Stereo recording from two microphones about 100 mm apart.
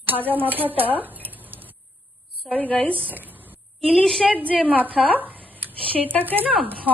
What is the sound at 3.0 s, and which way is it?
Speech, 20° right (ahead or behind).